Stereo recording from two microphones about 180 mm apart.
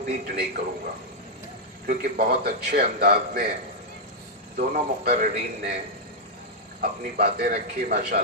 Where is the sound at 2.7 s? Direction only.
55° right (ahead or behind).